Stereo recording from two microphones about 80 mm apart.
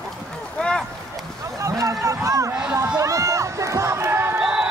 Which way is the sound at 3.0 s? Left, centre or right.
Right.